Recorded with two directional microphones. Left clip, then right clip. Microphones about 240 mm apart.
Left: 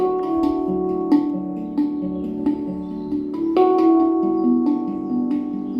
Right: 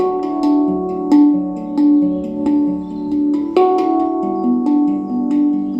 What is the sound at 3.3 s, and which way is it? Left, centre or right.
Music, right.